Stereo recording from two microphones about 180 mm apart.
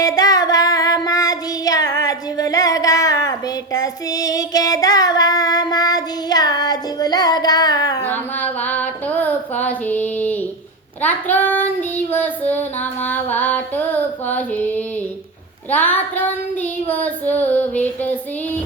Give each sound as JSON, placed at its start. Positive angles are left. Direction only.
{"t": 0.0, "sound": "child singing", "side_deg": 20}
{"t": 8.0, "sound": "a sound", "side_deg": 10}
{"t": 11.0, "sound": "child singing", "side_deg": 10}
{"t": 13.1, "sound": "music", "side_deg": 10}